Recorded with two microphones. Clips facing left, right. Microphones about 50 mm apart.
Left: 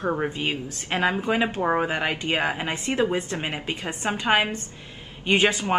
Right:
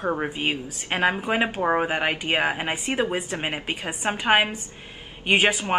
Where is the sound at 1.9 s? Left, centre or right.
Right.